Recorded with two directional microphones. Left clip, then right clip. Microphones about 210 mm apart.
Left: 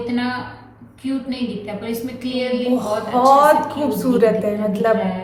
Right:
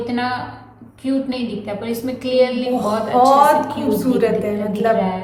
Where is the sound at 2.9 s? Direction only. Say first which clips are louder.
Right 2 dB; 20° right (ahead or behind).